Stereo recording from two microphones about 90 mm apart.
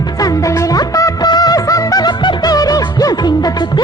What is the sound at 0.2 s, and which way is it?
Music, 40° left (ahead or behind).